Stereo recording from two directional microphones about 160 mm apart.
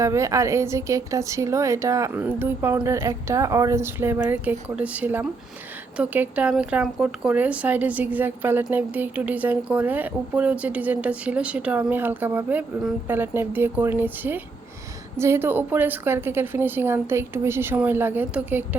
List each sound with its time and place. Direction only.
0.0 s speech: 20° right (ahead or behind)